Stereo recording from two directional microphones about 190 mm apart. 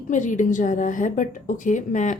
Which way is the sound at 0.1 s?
40° left (ahead or behind).